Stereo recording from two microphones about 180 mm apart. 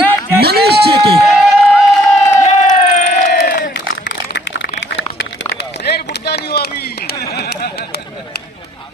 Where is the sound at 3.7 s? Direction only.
75° left (ahead or behind).